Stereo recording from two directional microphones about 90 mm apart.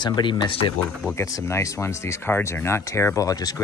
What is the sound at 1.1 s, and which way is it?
Speech, 30° left (ahead or behind).